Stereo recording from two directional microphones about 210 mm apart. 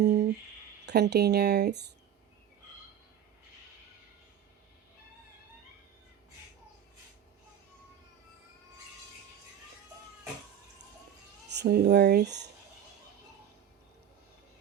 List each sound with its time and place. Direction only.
0.0 s a sound: 50° right (ahead or behind)
0.9 s speech: 55° right (ahead or behind)
11.4 s speech: 50° right (ahead or behind)